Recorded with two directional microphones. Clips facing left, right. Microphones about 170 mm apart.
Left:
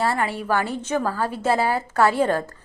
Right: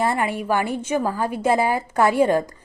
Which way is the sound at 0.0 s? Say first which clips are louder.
Right 1 dB; 15° right (ahead or behind).